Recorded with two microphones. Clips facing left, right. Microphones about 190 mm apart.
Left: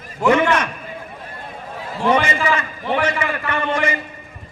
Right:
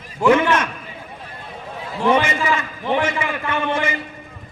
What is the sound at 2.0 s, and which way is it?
A man's voice, 5° right (ahead or behind).